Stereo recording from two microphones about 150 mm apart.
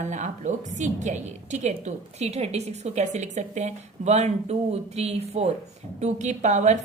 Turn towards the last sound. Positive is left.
turn(degrees=-50)  # may be behind; listen again after turning